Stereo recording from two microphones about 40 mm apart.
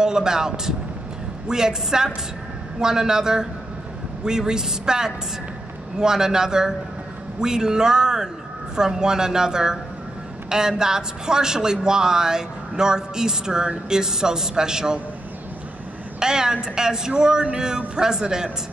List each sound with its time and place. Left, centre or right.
0.0 s a man's voice: centre
16.2 s a man's voice: centre